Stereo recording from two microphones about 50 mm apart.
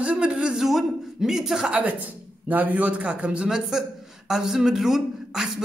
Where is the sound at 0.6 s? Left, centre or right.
Centre.